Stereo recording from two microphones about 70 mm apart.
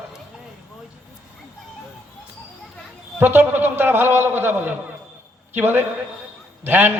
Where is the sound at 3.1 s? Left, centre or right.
Right.